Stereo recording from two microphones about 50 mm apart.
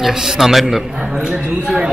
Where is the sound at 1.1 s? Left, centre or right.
Centre.